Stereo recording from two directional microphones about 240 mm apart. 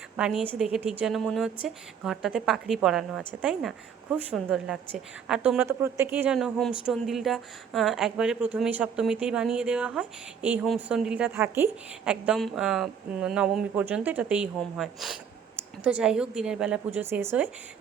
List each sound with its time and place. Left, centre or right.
0.2 s a woman's voice: centre